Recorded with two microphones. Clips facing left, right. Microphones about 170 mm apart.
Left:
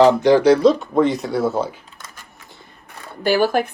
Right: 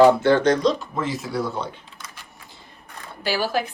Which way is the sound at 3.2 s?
55° left (ahead or behind).